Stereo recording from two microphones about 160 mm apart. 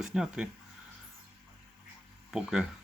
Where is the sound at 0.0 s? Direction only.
5° right (ahead or behind).